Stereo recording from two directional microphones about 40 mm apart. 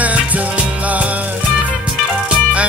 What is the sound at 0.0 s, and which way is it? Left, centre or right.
Music, right.